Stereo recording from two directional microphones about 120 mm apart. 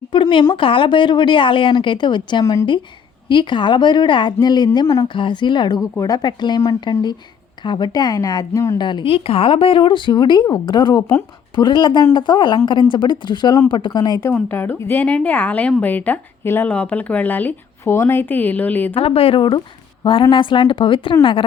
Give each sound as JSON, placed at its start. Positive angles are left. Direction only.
{"t": 0.1, "sound": "a sound", "side_deg": 45}
{"t": 0.5, "sound": "speech", "side_deg": 45}
{"t": 3.2, "sound": "speech", "side_deg": 40}
{"t": 8.8, "sound": "speech", "side_deg": 40}
{"t": 14.3, "sound": "a woman's voice", "side_deg": 15}
{"t": 18.9, "sound": "speech", "side_deg": 55}